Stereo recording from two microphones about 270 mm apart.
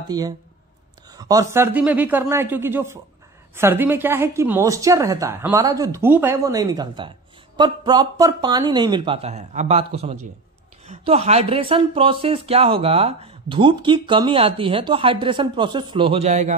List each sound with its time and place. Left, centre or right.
0.1 s a woman's voice: centre